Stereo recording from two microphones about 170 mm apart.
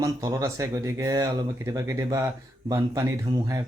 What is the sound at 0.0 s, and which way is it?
Speech, 20° right (ahead or behind).